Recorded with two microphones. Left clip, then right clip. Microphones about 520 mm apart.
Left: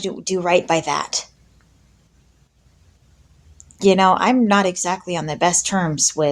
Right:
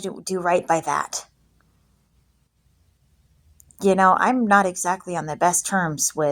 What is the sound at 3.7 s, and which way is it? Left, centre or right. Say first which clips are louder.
Speech: left 2 dB; right.